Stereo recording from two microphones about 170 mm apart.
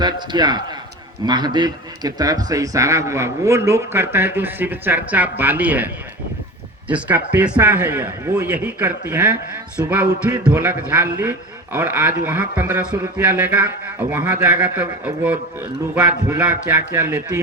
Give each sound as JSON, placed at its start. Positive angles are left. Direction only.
{"t": 0.0, "sound": "a man's voice", "side_deg": -25}